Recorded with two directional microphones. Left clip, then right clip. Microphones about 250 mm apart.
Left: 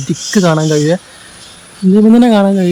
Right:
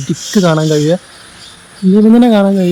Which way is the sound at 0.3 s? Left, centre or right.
Centre.